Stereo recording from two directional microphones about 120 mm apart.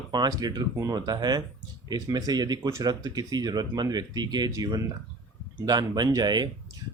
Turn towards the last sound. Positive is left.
turn(degrees=-35)  # may be behind; listen again after turning